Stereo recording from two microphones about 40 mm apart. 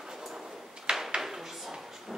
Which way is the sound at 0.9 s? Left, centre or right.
Centre.